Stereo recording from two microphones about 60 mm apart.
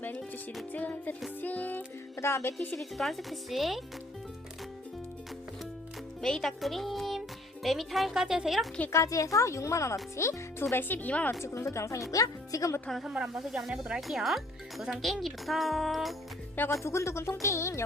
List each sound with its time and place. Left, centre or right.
0.7 s music: left
2.1 s speech: left
2.7 s speech: centre
6.2 s speech: centre
8.9 s speech: left
11.4 s speech: left
12.1 s speech: left
12.9 s speech: centre
16.8 s speech: left